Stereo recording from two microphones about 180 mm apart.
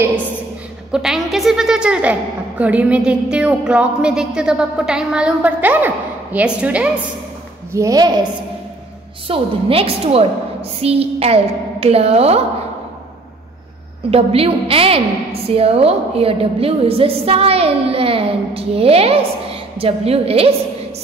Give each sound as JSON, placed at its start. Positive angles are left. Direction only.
{"t": 0.9, "sound": "a woman's voice", "side_deg": 0}
{"t": 7.7, "sound": "a woman's voice", "side_deg": -20}
{"t": 9.3, "sound": "a woman's voice", "side_deg": -30}
{"t": 14.1, "sound": "a woman's voice", "side_deg": -30}